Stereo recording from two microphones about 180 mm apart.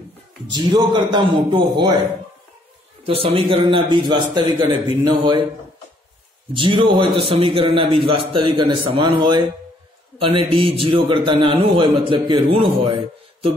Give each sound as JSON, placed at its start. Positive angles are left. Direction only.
{"t": 0.5, "sound": "a man's voice", "side_deg": -25}
{"t": 3.1, "sound": "a man's voice", "side_deg": -30}
{"t": 6.5, "sound": "a man's voice", "side_deg": -25}